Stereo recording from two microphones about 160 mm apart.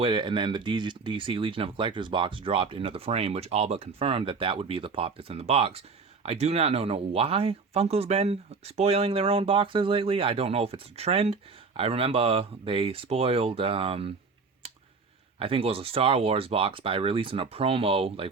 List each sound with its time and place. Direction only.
0.0 s speech: 30° right (ahead or behind)
15.4 s speech: 35° right (ahead or behind)